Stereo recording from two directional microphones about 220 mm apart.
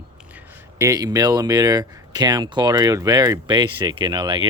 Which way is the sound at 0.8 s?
15° right (ahead or behind).